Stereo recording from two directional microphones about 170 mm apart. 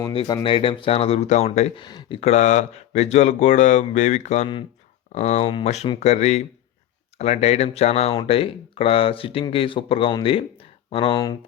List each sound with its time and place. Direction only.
0.1 s speech: 35° left (ahead or behind)
1.8 s speech: 25° left (ahead or behind)